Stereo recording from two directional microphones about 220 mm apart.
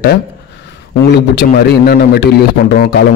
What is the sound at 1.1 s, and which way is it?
A man's voice, 50° left (ahead or behind).